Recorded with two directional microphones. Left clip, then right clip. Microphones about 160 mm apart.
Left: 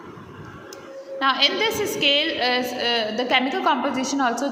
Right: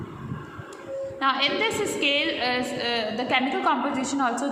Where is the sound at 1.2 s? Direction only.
15° left (ahead or behind).